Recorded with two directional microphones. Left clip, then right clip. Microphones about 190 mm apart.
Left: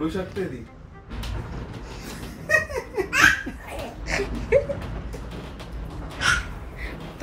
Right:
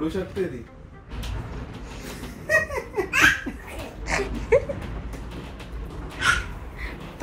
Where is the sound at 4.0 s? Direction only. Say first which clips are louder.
Right 2 dB; 10° left (ahead or behind).